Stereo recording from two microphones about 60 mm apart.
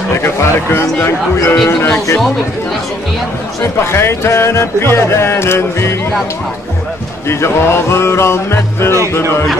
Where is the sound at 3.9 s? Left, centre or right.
Left.